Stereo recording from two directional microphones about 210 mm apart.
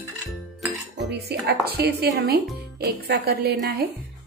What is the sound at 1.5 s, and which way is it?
Speech, 50° right (ahead or behind).